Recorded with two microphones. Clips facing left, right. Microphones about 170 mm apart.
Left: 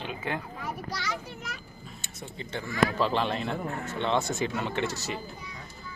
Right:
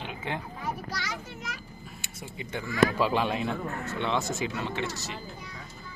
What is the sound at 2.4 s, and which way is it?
A man's voice, 10° right (ahead or behind).